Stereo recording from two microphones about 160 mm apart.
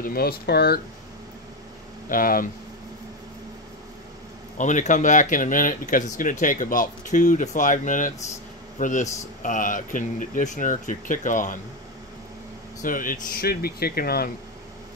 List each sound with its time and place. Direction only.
0.0 s speech: 70° left (ahead or behind)
2.0 s speech: 60° left (ahead or behind)
4.6 s speech: 50° left (ahead or behind)
12.8 s speech: 60° left (ahead or behind)